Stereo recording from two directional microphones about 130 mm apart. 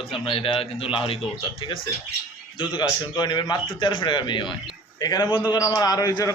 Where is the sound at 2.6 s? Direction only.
35° left (ahead or behind).